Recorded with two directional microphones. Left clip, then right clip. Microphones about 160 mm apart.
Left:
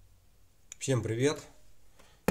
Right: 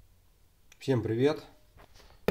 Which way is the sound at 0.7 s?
35° right (ahead or behind).